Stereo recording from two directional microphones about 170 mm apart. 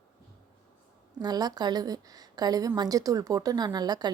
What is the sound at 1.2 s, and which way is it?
A woman's voice, 25° right (ahead or behind).